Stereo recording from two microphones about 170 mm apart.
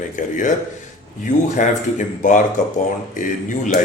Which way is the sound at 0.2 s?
50° left (ahead or behind).